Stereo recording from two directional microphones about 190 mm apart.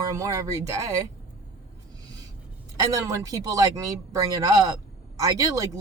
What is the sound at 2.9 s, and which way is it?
Speech, 20° right (ahead or behind).